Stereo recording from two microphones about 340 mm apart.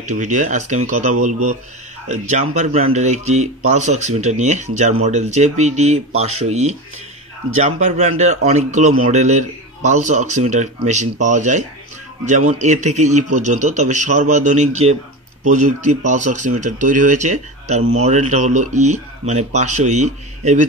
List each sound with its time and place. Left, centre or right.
0.0 s speech: right